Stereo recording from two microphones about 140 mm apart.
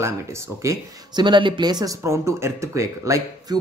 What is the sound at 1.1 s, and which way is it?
Speech, 35° right (ahead or behind).